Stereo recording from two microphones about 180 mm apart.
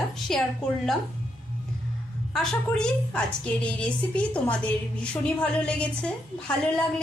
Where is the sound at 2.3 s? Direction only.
Centre (ahead or behind).